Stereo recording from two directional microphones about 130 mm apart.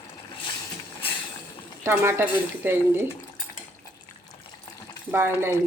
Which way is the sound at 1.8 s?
20° right (ahead or behind).